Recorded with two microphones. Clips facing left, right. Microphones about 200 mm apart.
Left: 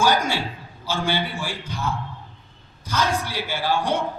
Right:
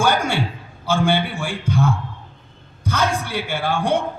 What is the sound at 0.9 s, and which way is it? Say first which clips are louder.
A man's voice: right 6 dB; 55° right (ahead or behind).